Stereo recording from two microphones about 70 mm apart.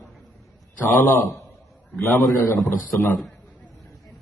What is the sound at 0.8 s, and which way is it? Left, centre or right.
Speech, left.